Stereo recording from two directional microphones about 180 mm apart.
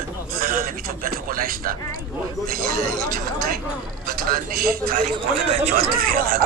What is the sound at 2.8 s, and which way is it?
Speech, 5° left (ahead or behind).